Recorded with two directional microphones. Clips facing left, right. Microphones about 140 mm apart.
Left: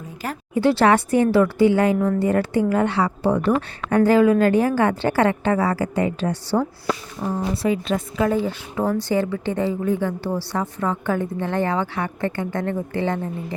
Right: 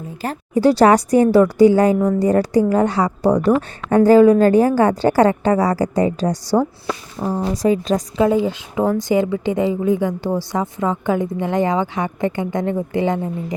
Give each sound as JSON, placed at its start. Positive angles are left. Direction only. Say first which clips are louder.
{"t": 0.2, "sound": "a woman's voice", "louder": "right 4 dB", "side_deg": -35}
{"t": 8.2, "sound": "a woman's voice", "louder": "right 5 dB", "side_deg": -15}